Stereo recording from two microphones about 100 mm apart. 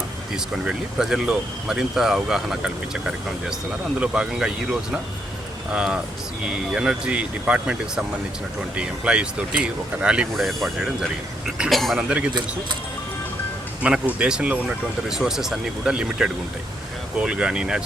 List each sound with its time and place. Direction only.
0.3 s speech: 5° right (ahead or behind)
12.0 s speech: 15° right (ahead or behind)
13.8 s speech: 10° right (ahead or behind)